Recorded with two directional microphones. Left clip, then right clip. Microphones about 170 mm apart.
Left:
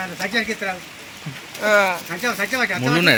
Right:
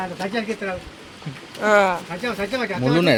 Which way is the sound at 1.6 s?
45° right (ahead or behind).